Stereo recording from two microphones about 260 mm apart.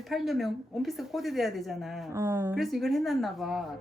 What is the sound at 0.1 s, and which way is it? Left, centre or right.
A woman's voice, centre.